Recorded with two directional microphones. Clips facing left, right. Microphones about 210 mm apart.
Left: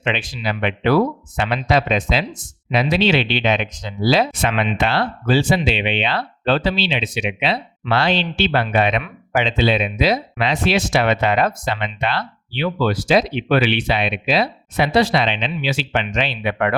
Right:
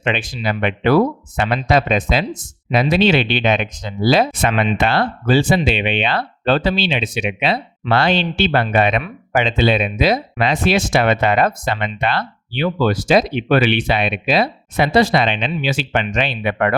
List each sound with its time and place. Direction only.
0.0 s speech: 50° right (ahead or behind)